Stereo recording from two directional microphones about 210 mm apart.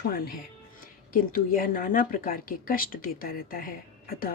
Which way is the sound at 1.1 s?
40° left (ahead or behind).